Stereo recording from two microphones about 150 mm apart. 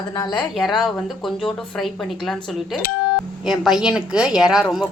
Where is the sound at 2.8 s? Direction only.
85° left.